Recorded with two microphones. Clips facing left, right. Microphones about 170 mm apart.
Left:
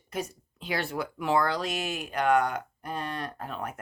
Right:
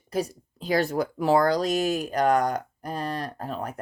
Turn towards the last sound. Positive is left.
turn(degrees=-35)  # may be behind; listen again after turning